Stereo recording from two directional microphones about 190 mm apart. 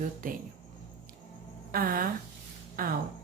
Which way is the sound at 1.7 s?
50° right (ahead or behind).